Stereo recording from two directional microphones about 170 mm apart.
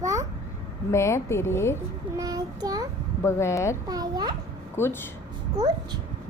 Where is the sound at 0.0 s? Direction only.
20° right (ahead or behind).